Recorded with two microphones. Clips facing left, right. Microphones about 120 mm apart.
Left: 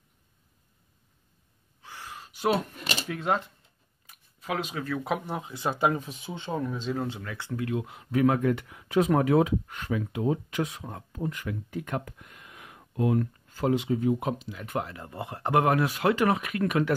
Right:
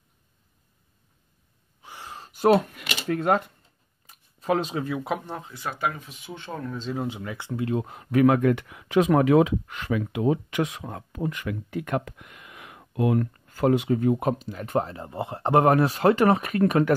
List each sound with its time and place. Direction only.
1.8 s gasp: 20° right (ahead or behind)
2.1 s a sound: 40° right (ahead or behind)
2.7 s a sound: 35° left (ahead or behind)
3.1 s speech: 50° right (ahead or behind)
4.0 s a sound: 35° right (ahead or behind)
5.0 s speech: 5° left (ahead or behind)
5.5 s speech: 25° left (ahead or behind)
6.5 s speech: 10° left (ahead or behind)
7.1 s speech: 20° right (ahead or behind)
7.8 s speech: 45° right (ahead or behind)
8.1 s speech: 75° right (ahead or behind); by 16.9 s 40° right (ahead or behind)